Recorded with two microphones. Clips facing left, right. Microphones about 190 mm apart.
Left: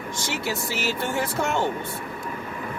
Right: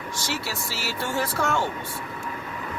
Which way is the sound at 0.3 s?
20° left (ahead or behind).